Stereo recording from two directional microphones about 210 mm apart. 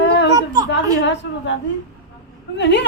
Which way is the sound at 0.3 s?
15° right (ahead or behind).